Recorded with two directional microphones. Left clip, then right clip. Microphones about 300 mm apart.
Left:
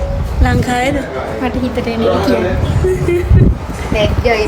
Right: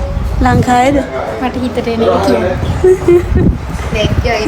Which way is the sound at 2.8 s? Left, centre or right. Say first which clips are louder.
Right 7 dB; centre.